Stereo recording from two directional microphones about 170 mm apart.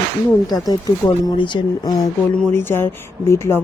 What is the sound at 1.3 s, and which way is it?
Speech, 25° left (ahead or behind).